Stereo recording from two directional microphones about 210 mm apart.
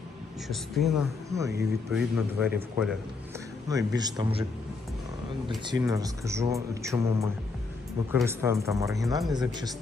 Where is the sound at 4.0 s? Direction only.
20° right (ahead or behind).